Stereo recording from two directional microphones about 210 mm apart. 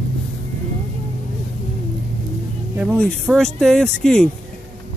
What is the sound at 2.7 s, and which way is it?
Speech, 10° right (ahead or behind).